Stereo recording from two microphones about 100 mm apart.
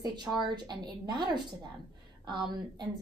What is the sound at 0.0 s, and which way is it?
A woman's voice, 45° right (ahead or behind).